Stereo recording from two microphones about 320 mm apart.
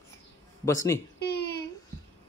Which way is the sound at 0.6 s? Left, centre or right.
Centre.